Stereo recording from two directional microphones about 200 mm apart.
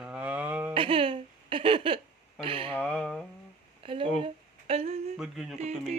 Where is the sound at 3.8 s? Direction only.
25° right (ahead or behind).